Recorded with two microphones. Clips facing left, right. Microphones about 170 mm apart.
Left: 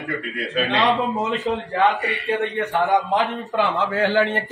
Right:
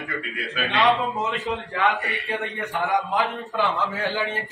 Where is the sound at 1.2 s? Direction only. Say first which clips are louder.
Left 4 dB; centre (ahead or behind).